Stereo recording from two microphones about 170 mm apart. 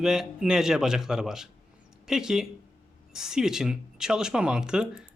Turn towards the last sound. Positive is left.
turn(degrees=-5)  # may be behind; listen again after turning